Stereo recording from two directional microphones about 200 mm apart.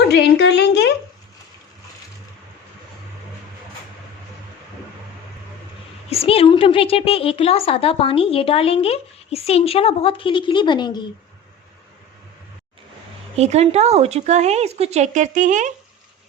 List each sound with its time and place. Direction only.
0.1 s a sound: 55° left (ahead or behind)
6.1 s a woman's voice: 30° left (ahead or behind)
13.3 s speech: 35° right (ahead or behind)